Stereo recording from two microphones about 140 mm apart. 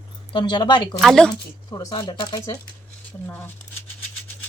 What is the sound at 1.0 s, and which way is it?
Speech, 5° left (ahead or behind).